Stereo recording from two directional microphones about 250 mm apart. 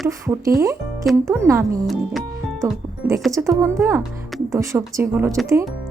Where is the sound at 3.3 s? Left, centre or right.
Centre.